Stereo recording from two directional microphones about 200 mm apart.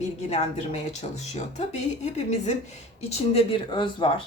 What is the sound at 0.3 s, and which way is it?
Speech, 35° left (ahead or behind).